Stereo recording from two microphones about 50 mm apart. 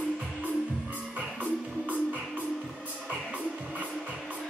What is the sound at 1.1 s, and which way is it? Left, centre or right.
Music, right.